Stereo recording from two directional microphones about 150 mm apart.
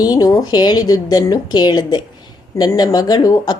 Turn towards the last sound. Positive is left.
turn(degrees=25)  # may be behind; listen again after turning